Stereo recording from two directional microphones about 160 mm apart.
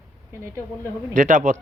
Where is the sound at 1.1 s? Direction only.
55° right (ahead or behind).